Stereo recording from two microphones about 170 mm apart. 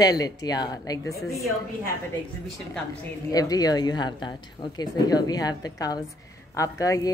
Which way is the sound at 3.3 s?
20° left (ahead or behind).